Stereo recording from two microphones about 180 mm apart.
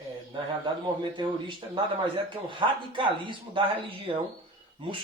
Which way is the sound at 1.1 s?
25° right (ahead or behind).